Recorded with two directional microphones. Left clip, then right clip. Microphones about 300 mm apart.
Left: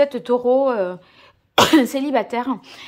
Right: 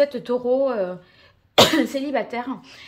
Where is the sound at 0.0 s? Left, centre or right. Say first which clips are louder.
Left 3 dB; centre.